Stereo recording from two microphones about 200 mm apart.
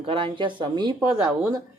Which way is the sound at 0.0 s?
25° right (ahead or behind).